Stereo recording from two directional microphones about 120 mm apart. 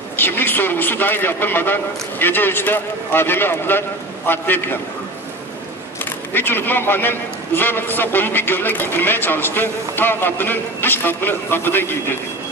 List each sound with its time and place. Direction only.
0.1 s a man's voice: 15° left (ahead or behind)
6.3 s a man's voice: 15° left (ahead or behind)